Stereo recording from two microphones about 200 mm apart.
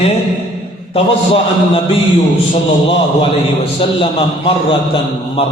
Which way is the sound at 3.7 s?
30° left (ahead or behind).